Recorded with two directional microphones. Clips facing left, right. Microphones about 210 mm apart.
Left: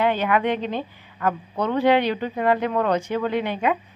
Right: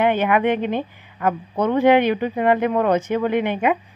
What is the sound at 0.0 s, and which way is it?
A woman's voice, 15° right (ahead or behind).